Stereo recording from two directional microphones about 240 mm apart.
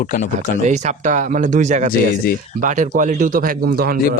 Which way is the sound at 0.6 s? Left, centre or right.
Right.